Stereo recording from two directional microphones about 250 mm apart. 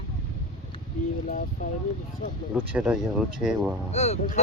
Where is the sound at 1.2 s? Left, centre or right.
Left.